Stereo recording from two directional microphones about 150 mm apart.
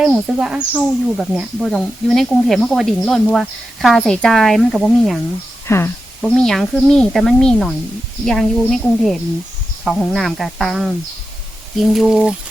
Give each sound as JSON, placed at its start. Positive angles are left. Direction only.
{"t": 0.0, "sound": "speech", "side_deg": -5}
{"t": 5.6, "sound": "speech", "side_deg": 15}
{"t": 6.2, "sound": "speech", "side_deg": 5}